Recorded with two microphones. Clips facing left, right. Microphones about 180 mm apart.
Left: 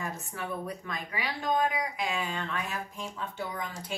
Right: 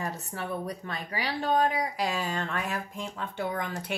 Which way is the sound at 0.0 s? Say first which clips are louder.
Right 2 dB; 40° right (ahead or behind).